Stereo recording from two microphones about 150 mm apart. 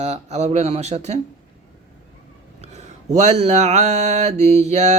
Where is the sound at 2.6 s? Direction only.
45° right (ahead or behind).